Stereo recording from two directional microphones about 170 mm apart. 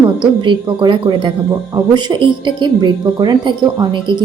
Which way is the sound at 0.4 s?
30° right (ahead or behind).